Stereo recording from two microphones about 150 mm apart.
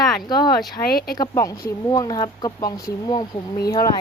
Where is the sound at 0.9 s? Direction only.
85° left.